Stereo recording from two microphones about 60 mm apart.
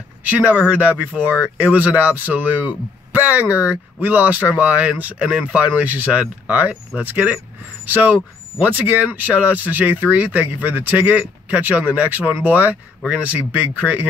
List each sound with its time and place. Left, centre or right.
0.2 s speech: right